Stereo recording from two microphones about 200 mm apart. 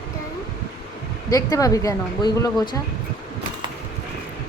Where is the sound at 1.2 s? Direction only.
15° left (ahead or behind).